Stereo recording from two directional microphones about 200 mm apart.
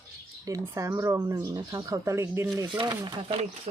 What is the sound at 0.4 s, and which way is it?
Speech, 15° right (ahead or behind).